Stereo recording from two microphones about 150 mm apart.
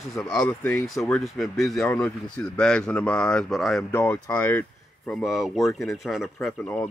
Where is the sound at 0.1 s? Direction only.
5° left (ahead or behind).